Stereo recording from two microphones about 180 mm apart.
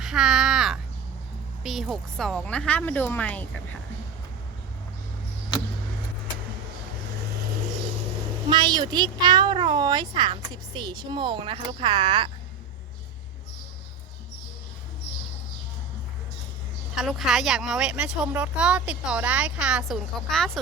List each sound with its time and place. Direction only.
0.0 s crow: centre (ahead or behind)
1.6 s speech: centre (ahead or behind)
8.4 s speech: 25° right (ahead or behind)
16.9 s speech: centre (ahead or behind)